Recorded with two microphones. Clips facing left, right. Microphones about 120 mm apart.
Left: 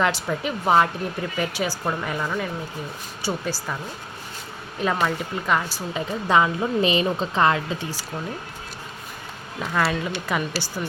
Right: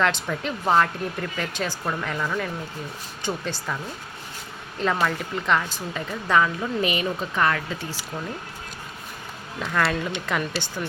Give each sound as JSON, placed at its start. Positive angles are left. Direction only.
{"t": 0.0, "sound": "speech", "side_deg": 10}
{"t": 4.8, "sound": "speech", "side_deg": 10}
{"t": 9.6, "sound": "speech", "side_deg": 10}